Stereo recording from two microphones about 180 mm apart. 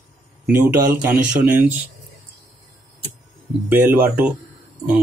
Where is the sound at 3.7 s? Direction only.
10° right (ahead or behind).